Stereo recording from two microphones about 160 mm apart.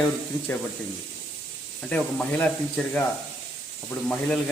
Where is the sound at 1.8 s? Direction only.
10° left (ahead or behind).